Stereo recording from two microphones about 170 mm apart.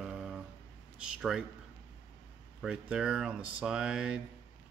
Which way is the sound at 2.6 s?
5° right (ahead or behind).